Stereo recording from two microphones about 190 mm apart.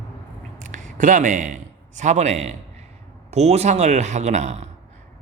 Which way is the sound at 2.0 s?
35° right (ahead or behind).